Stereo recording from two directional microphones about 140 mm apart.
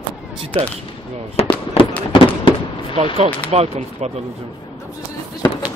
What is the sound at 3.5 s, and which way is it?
Speech, 50° right (ahead or behind).